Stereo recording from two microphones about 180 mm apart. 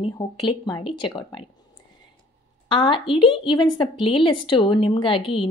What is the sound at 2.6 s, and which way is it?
A woman's voice, 25° left (ahead or behind).